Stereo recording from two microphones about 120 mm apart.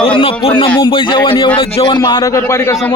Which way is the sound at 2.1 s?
30° left (ahead or behind).